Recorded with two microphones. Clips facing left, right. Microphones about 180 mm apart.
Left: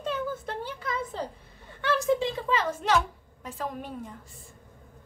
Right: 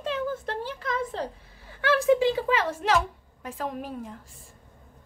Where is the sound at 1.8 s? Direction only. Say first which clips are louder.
Right 4 dB; 80° right.